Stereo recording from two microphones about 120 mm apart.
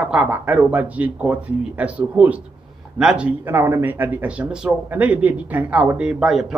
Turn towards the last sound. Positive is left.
turn(degrees=-5)  # may be behind; listen again after turning